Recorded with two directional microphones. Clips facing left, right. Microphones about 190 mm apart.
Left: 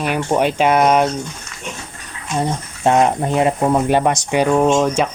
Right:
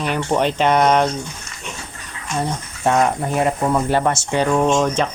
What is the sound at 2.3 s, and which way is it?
Speech, 20° left (ahead or behind).